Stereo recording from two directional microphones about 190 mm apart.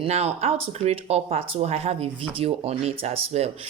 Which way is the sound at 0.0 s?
35° right (ahead or behind).